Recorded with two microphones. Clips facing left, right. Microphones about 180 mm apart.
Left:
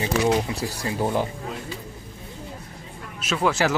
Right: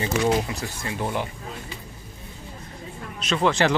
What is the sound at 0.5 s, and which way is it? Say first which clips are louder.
Speech: left 3 dB; 30° left (ahead or behind).